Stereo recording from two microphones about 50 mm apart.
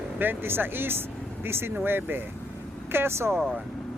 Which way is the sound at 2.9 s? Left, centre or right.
Right.